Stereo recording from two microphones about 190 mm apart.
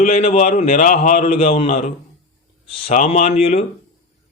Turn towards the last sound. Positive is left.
turn(degrees=35)  # may be behind; listen again after turning